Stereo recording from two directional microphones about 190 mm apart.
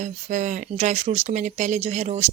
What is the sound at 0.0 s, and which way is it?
A woman's voice, 40° right (ahead or behind).